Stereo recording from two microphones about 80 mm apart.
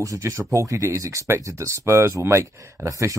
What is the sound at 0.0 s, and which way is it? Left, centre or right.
Speech, right.